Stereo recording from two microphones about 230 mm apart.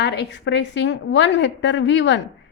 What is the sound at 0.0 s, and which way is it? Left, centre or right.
A woman's voice, left.